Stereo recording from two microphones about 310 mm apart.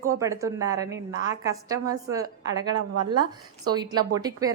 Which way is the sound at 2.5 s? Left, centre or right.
Right.